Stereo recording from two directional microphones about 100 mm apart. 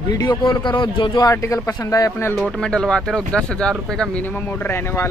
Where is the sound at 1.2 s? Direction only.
30° left (ahead or behind).